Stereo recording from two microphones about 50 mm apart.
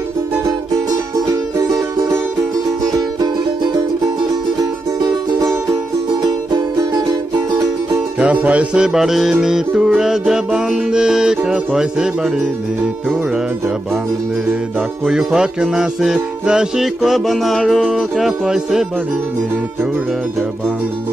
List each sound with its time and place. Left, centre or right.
1.3 s music: right
8.2 s music: right
8.8 s music: centre
15.0 s music: centre